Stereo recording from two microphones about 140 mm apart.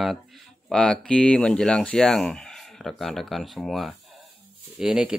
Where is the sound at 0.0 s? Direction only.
Centre (ahead or behind).